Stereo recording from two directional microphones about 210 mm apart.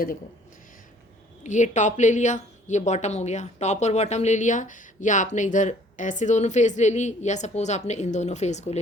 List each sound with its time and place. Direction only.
1.5 s a woman's voice: 35° left (ahead or behind)